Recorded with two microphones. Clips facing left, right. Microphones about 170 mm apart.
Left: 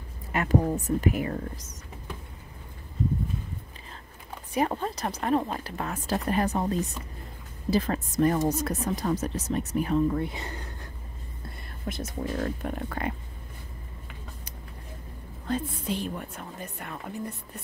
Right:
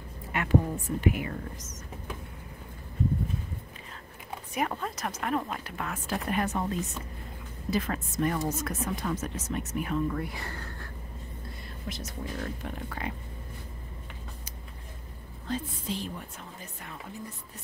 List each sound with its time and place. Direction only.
0.3 s speech: 40° left (ahead or behind)
4.6 s speech: 30° left (ahead or behind)
11.9 s speech: 50° left (ahead or behind)
15.4 s speech: 55° left (ahead or behind)